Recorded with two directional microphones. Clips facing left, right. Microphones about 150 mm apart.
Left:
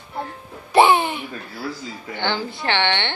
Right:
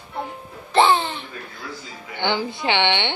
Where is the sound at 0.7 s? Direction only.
15° left (ahead or behind).